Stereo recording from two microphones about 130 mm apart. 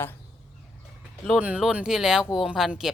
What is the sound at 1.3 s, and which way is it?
Speech, 10° right (ahead or behind).